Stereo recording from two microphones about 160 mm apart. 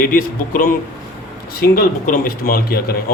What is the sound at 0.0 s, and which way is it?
A man's voice, 60° left (ahead or behind).